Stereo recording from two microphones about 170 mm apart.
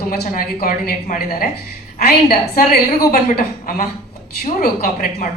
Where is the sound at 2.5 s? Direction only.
60° left (ahead or behind).